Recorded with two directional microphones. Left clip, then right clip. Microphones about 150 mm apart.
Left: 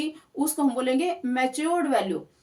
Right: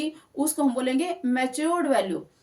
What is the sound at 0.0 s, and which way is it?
Speech, 25° right (ahead or behind).